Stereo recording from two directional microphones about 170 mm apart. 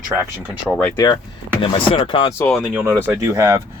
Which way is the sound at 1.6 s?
30° left (ahead or behind).